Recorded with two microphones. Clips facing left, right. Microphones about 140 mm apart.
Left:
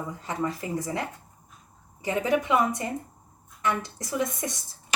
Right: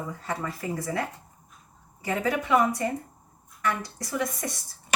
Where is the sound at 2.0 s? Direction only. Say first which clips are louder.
Left 2 dB; 20° left (ahead or behind).